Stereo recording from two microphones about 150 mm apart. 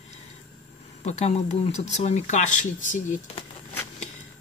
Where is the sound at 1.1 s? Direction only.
50° left (ahead or behind).